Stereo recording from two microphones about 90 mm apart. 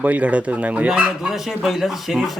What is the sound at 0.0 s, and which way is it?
Speech, 15° right (ahead or behind).